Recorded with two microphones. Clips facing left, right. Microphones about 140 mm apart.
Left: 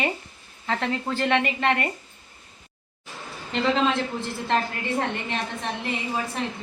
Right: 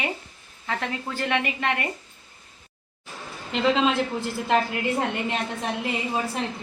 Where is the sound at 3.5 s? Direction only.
5° right (ahead or behind).